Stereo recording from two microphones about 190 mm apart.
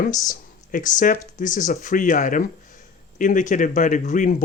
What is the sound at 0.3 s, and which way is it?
Speech, 45° left (ahead or behind).